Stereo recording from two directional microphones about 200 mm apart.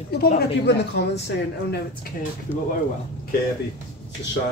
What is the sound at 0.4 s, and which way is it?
Speech, 55° left (ahead or behind).